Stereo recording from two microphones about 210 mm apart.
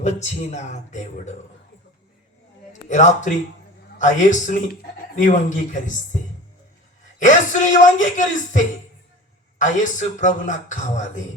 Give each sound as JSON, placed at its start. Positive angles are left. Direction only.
{"t": 0.0, "sound": "speech", "side_deg": 35}
{"t": 2.9, "sound": "speech", "side_deg": 35}
{"t": 7.2, "sound": "speech", "side_deg": 35}